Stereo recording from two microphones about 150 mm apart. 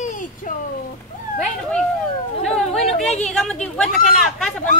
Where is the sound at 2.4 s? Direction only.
5° left (ahead or behind).